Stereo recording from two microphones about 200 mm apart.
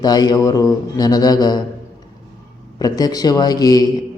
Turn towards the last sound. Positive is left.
turn(degrees=20)  # may be behind; listen again after turning